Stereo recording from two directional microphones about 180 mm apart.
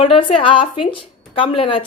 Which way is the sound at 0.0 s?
30° left (ahead or behind).